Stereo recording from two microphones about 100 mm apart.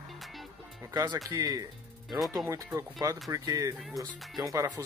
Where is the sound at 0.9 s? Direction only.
40° right (ahead or behind).